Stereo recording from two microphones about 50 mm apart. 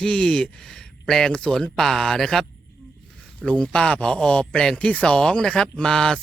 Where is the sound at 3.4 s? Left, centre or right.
Centre.